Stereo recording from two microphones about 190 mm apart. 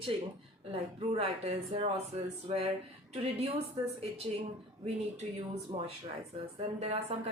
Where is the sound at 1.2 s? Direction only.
30° right (ahead or behind).